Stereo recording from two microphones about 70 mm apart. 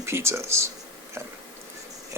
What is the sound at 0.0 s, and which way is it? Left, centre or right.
Speech, right.